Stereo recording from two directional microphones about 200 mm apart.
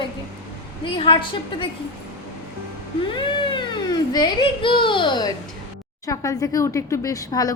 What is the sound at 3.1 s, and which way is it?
Speech, 25° left (ahead or behind).